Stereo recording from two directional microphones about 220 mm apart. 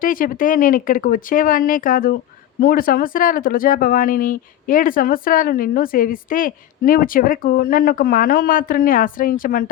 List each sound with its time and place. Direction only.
0.0 s speech: 40° left (ahead or behind)